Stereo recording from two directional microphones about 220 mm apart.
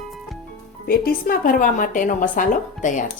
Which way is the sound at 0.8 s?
40° left (ahead or behind).